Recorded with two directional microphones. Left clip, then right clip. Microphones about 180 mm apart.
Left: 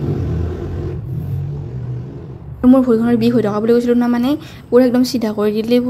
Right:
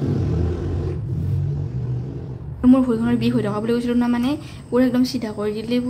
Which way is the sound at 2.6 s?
30° left (ahead or behind).